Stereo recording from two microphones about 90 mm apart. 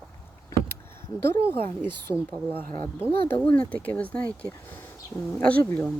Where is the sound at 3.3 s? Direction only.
20° left (ahead or behind).